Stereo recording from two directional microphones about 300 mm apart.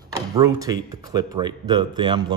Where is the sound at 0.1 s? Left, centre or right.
Centre.